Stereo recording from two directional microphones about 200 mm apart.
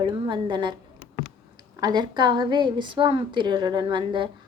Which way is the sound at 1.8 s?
20° right (ahead or behind).